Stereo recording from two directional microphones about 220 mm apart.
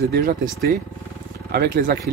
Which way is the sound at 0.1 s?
45° right (ahead or behind).